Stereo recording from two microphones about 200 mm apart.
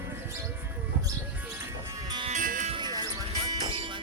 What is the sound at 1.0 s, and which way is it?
Music, 15° right (ahead or behind).